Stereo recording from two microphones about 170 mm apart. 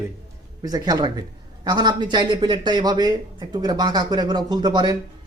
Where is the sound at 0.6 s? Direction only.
20° right (ahead or behind).